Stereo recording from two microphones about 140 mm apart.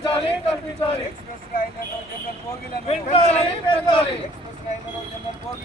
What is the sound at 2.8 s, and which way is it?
Speech, 45° left (ahead or behind).